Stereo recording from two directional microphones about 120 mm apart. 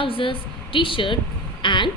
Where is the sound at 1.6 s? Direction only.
40° left (ahead or behind).